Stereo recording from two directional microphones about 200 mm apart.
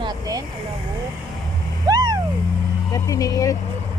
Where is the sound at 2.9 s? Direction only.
15° left (ahead or behind).